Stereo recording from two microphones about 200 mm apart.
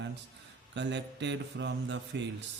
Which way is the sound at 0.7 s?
60° right (ahead or behind).